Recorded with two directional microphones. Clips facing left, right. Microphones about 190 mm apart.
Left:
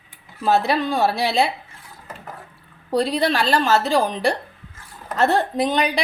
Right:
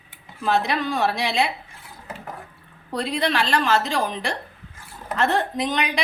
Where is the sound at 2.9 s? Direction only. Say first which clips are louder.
Left 5 dB; 35° left (ahead or behind).